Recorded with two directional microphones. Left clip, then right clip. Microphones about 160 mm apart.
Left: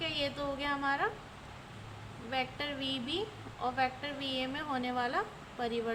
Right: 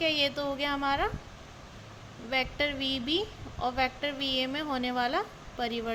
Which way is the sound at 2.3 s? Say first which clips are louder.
Right 6 dB; 40° right (ahead or behind).